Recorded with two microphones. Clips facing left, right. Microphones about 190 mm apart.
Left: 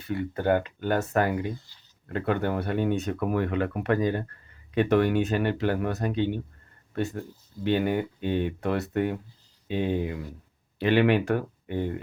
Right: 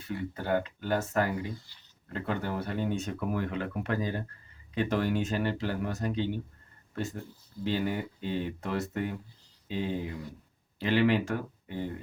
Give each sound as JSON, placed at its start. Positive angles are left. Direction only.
{"t": 0.0, "sound": "speech", "side_deg": 65}
{"t": 7.6, "sound": "speech", "side_deg": 60}